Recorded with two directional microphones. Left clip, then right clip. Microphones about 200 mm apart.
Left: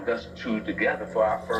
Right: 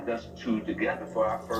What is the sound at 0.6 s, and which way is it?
Speech, 40° left (ahead or behind).